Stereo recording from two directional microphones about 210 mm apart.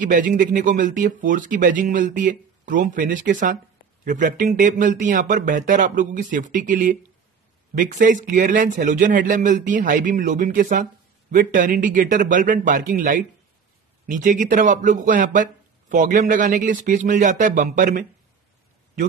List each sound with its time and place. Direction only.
0.0 s speech: 40° right (ahead or behind)